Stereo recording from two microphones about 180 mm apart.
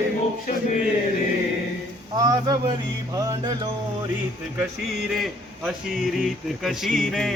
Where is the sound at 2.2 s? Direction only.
20° right (ahead or behind).